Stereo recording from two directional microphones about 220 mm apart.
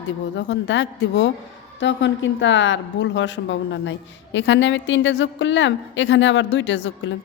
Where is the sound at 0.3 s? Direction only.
55° left (ahead or behind).